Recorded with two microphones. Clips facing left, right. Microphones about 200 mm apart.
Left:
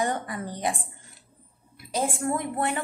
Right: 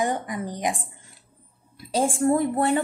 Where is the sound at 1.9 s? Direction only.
30° right (ahead or behind).